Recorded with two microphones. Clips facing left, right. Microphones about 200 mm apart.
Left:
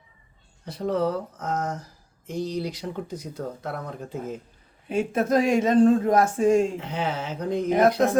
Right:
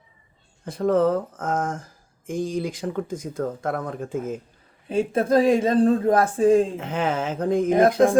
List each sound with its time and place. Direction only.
0.6 s speech: 50° right (ahead or behind)
4.9 s speech: 30° right (ahead or behind)
6.7 s speech: 50° right (ahead or behind)